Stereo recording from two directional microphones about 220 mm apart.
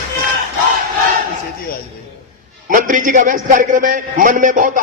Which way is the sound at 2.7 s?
35° right (ahead or behind).